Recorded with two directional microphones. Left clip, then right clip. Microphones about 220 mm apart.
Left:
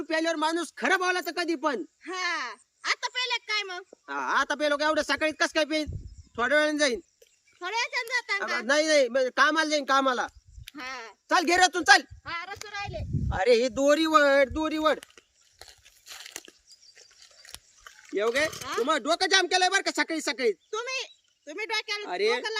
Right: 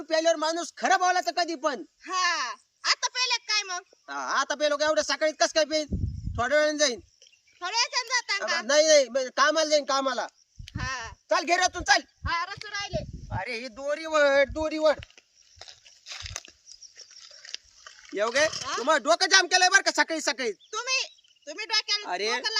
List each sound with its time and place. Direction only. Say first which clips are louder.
0.0 s a man's voice: right 3 dB; 10° left (ahead or behind)
2.0 s speech: right 4 dB; 5° right (ahead or behind)
4.0 s a man's voice: left 2 dB; 10° left (ahead or behind)
7.6 s speech: right 2 dB; centre (ahead or behind)
8.6 s a man's voice: right 3 dB; 10° left (ahead or behind)
10.8 s a sound: right 4 dB; 10° right (ahead or behind)
11.3 s speech: left 2 dB; 20° left (ahead or behind)
12.2 s a child's voice: right 5 dB; 20° right (ahead or behind)
13.2 s speech: left 11 dB; 35° left (ahead or behind); by 14.9 s 10° left (ahead or behind)
15.0 s a sound: right 2 dB; centre (ahead or behind)
17.0 s speech: right 5 dB; 10° right (ahead or behind)